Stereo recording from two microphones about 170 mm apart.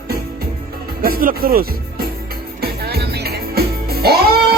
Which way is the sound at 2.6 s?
70° right (ahead or behind).